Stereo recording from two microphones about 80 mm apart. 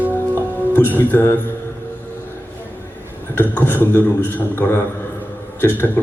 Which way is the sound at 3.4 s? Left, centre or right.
Left.